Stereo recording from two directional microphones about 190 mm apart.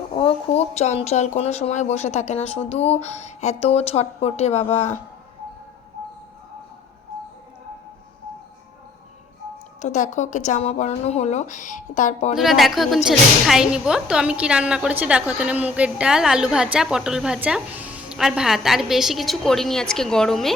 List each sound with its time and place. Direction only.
0.1 s speech: 30° left (ahead or behind)
9.8 s speech: 40° left (ahead or behind)
12.3 s speech: centre (ahead or behind)